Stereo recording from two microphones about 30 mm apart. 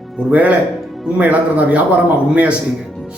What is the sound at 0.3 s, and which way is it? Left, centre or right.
A man's voice, right.